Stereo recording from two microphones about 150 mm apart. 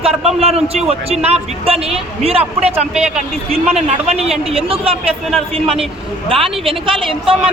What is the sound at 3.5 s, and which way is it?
Speech, 45° right (ahead or behind).